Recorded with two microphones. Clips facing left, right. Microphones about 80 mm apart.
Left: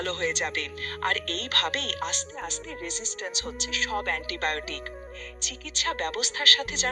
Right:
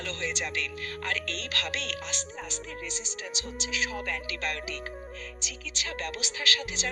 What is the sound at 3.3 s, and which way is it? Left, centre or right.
Speech, left.